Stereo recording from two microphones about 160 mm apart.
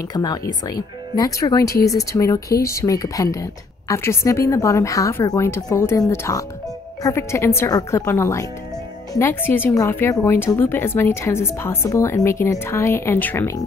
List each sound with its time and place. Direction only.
0.1 s a woman's voice: 25° left (ahead or behind)